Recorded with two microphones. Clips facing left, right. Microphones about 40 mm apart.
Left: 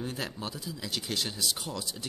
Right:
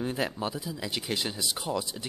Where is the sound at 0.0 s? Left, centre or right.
Centre.